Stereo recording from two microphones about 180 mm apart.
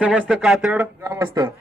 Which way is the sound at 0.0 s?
5° right (ahead or behind).